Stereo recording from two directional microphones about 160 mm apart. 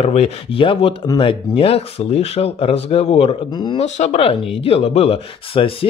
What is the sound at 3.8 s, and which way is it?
Speech, 45° left (ahead or behind).